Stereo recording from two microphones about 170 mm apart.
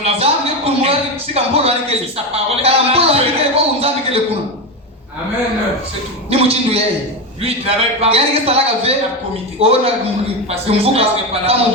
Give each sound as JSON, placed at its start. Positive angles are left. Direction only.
{"t": 0.0, "sound": "a man's voice", "side_deg": -35}
{"t": 6.3, "sound": "a man's voice", "side_deg": -35}